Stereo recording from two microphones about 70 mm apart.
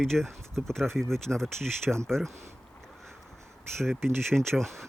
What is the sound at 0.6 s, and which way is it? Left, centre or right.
Speech, centre.